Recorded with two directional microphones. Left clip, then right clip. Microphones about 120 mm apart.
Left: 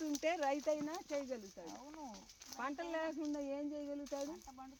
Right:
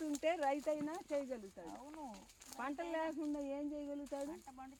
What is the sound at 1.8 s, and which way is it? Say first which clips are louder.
Speech: right 1 dB; 40° right (ahead or behind).